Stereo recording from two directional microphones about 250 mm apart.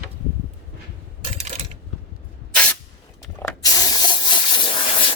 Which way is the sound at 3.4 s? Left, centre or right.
Centre.